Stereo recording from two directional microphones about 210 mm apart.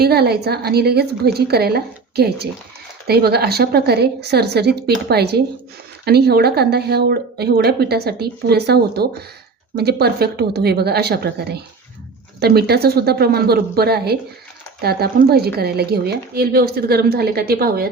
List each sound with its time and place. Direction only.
0.0 s speech: 50° right (ahead or behind)